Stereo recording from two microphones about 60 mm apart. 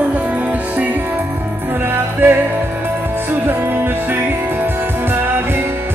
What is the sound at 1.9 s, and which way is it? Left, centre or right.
Music, right.